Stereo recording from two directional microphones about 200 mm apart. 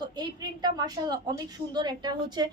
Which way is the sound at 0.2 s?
20° right (ahead or behind).